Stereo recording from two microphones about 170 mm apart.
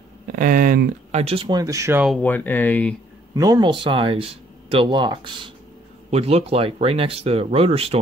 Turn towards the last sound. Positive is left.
turn(degrees=-35)  # may be behind; listen again after turning